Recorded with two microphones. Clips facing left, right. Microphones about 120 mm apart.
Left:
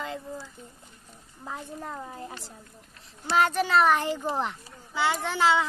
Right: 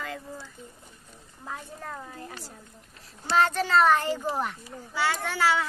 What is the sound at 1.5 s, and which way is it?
Speech, 15° left (ahead or behind).